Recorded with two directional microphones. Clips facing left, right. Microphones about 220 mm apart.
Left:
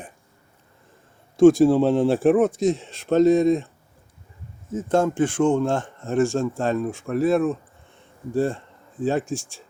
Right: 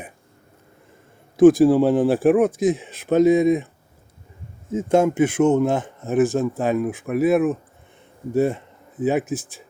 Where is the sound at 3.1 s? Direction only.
15° right (ahead or behind).